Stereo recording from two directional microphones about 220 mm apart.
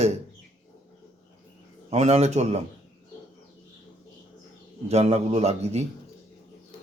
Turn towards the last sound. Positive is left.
turn(degrees=-30)  # may be behind; listen again after turning